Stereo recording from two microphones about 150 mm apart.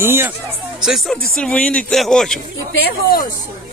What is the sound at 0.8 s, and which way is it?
Speech, centre (ahead or behind).